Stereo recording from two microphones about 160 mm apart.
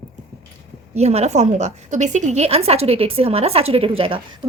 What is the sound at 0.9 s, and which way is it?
A woman's voice, 40° right (ahead or behind).